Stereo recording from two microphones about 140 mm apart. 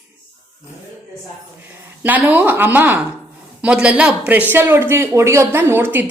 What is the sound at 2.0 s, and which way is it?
A woman's voice, 10° right (ahead or behind).